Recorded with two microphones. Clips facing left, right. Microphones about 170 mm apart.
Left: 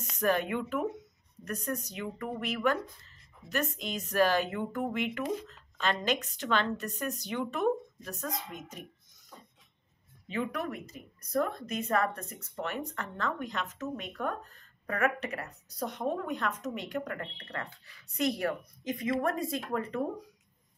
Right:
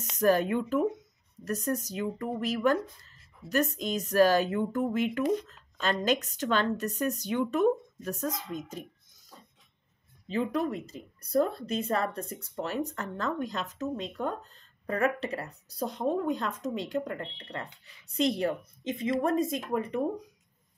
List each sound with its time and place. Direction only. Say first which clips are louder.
0.2 s a woman's voice: right 4 dB; 35° right (ahead or behind)
10.2 s speech: right 5 dB; 30° right (ahead or behind)